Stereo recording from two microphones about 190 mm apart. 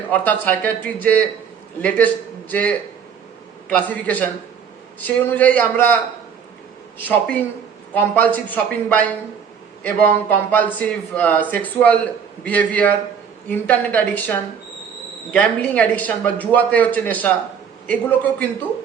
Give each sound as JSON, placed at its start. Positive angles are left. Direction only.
{"t": 0.1, "sound": "a man's voice", "side_deg": 10}
{"t": 2.5, "sound": "a man's voice", "side_deg": 10}
{"t": 7.1, "sound": "a man's voice", "side_deg": 10}